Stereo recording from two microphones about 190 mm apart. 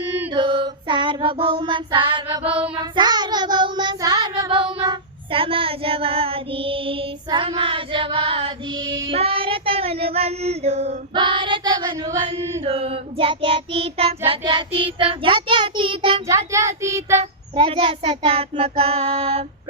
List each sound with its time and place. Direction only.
0.1 s child singing: 25° right (ahead or behind)
16.3 s speech: 15° right (ahead or behind)
17.5 s child singing: 25° right (ahead or behind)